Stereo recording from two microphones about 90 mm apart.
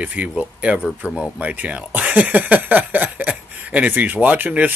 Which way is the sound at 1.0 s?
20° right (ahead or behind).